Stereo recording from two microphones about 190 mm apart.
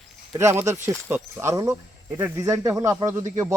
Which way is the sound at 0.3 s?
15° right (ahead or behind).